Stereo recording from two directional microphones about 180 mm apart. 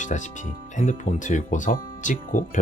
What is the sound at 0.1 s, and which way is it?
Speech, 45° left (ahead or behind).